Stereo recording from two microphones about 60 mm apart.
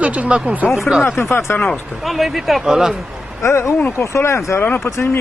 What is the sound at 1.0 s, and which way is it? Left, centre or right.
Speech, left.